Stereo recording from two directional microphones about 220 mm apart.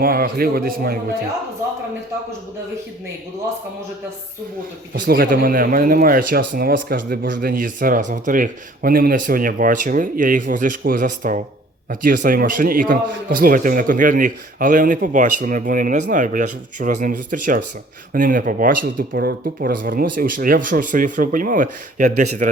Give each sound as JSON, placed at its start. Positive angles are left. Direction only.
{"t": 0.0, "sound": "a man's voice", "side_deg": -40}
{"t": 5.0, "sound": "a man's voice", "side_deg": -40}